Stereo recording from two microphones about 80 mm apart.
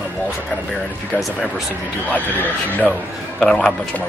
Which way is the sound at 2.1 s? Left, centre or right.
Left.